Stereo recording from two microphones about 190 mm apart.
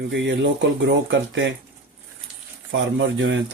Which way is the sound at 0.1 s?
70° right (ahead or behind).